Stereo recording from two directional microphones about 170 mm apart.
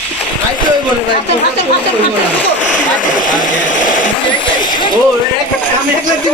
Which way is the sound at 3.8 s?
50° left (ahead or behind).